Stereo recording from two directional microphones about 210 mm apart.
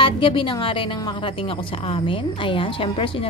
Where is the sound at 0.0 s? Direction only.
25° left (ahead or behind).